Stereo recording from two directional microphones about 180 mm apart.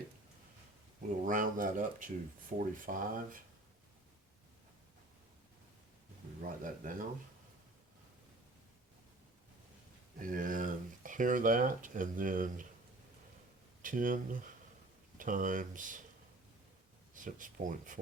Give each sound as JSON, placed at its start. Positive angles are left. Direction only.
{"t": 1.2, "sound": "speech", "side_deg": -50}
{"t": 6.4, "sound": "speech", "side_deg": -45}
{"t": 10.2, "sound": "speech", "side_deg": -50}
{"t": 13.8, "sound": "speech", "side_deg": -50}
{"t": 17.2, "sound": "speech", "side_deg": -45}